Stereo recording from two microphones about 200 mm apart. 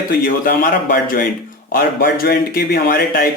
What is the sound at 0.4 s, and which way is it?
A man's voice, 45° left (ahead or behind).